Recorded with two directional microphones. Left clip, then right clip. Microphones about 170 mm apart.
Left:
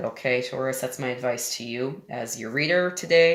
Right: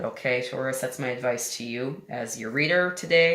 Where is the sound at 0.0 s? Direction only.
35° left (ahead or behind).